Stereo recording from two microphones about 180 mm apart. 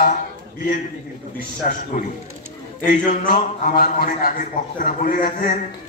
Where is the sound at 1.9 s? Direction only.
50° left (ahead or behind).